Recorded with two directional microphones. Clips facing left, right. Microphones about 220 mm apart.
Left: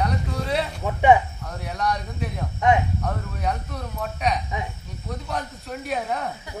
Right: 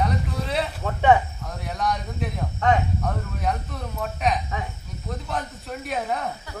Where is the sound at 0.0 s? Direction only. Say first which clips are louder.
Even; centre (ahead or behind).